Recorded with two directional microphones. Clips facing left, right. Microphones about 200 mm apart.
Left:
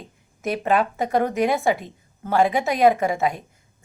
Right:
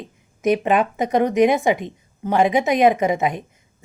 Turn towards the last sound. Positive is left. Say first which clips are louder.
# right 3 dB
turn(degrees=-20)  # may be behind; listen again after turning